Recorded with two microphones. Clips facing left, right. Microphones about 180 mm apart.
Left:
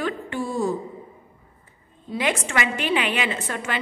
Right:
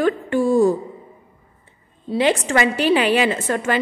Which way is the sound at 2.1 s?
30° right (ahead or behind).